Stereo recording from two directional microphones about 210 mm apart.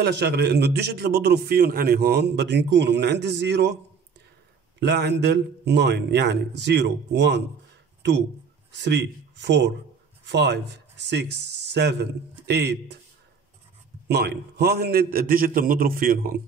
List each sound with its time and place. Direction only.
0.0 s a man's voice: 55° right (ahead or behind)
4.7 s a man's voice: 55° right (ahead or behind)
8.7 s a man's voice: 55° right (ahead or behind)
14.0 s a man's voice: 50° right (ahead or behind)